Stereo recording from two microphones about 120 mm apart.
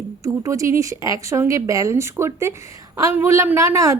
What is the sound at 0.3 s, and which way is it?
A woman's voice, 25° right (ahead or behind).